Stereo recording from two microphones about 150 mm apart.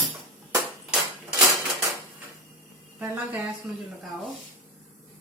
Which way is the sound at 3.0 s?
10° right (ahead or behind).